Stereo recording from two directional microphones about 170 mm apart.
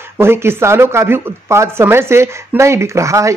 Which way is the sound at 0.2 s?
15° right (ahead or behind).